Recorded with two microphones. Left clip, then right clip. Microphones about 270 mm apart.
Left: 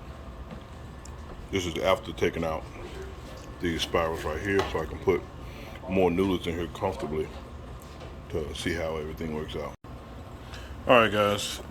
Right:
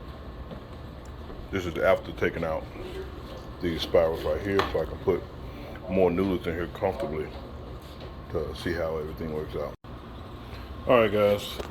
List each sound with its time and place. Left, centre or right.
1.5 s speech: centre
2.0 s speech: centre
3.6 s speech: centre
8.3 s speech: centre
10.8 s speech: centre